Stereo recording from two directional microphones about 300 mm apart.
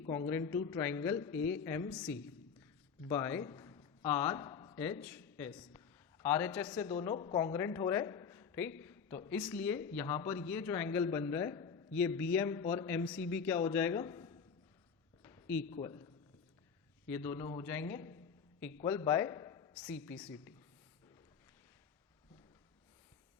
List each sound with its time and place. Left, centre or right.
0.0 s speech: left
0.3 s a man's voice: centre
1.3 s speech: left
1.6 s a man's voice: centre
3.1 s speech: centre
8.8 s a sound: centre
9.4 s a man's voice: centre
15.2 s a sound: centre
17.1 s a man's voice: centre